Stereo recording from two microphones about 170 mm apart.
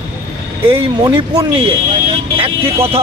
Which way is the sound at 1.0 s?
25° right (ahead or behind).